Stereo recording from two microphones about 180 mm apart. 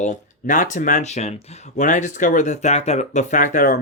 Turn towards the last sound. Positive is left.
turn(degrees=50)  # may be behind; listen again after turning